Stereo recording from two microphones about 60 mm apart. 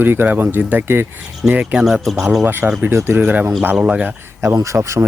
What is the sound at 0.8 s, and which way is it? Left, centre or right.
Speech, right.